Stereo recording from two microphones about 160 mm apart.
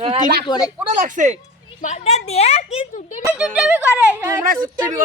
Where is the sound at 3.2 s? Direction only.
5° right (ahead or behind).